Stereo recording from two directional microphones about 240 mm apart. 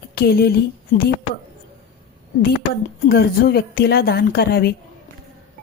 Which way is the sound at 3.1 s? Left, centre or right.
Left.